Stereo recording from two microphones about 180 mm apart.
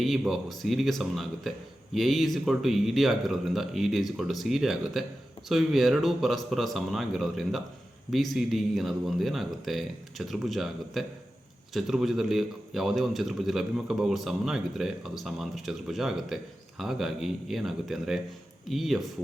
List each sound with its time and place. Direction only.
0.0 s a man's voice: centre (ahead or behind)